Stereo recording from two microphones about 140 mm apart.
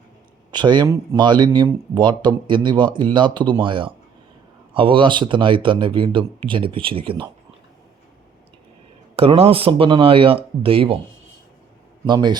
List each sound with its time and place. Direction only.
0.5 s speech: 30° right (ahead or behind)
9.1 s speech: 45° right (ahead or behind)
12.0 s speech: 30° right (ahead or behind)